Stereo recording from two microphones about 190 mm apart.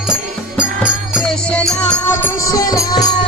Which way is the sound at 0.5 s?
5° right (ahead or behind).